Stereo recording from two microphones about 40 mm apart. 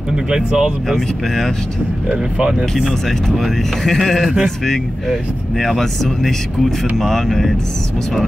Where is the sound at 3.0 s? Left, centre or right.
Centre.